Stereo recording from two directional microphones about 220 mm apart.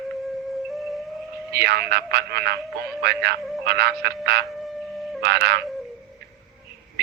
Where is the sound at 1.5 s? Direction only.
45° right (ahead or behind).